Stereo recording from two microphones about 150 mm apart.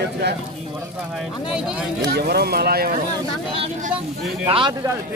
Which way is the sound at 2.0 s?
90° right.